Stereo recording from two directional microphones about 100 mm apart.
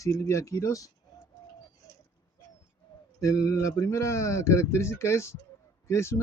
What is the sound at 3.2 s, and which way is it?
Speech, 35° left (ahead or behind).